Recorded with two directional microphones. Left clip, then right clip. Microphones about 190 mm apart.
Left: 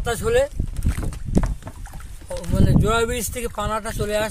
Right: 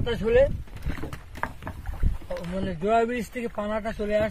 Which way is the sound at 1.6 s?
10° right (ahead or behind).